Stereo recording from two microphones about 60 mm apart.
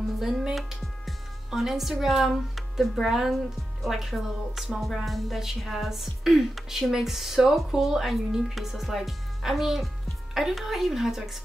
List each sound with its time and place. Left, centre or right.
0.2 s a woman's voice: centre